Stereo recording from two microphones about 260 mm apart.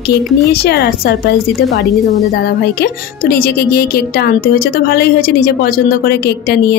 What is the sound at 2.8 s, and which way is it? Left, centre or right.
A woman's voice, left.